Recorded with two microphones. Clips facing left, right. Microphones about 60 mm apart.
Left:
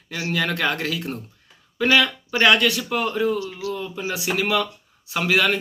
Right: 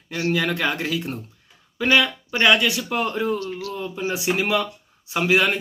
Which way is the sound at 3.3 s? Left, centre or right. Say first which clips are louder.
Left 1 dB; right.